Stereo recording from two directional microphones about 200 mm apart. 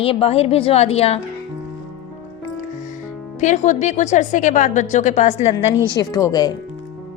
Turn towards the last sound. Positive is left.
turn(degrees=20)  # may be behind; listen again after turning